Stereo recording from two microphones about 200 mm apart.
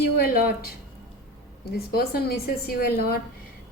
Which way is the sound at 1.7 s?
50° left (ahead or behind).